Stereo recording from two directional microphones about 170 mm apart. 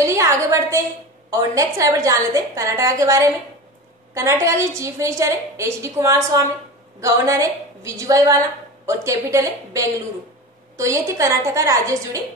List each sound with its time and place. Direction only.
0.0 s a woman's voice: 15° right (ahead or behind)